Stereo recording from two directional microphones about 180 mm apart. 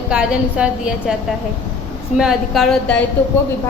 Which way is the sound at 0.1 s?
5° right (ahead or behind).